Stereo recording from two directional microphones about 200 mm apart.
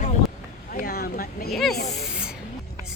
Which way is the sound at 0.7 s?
50° left (ahead or behind).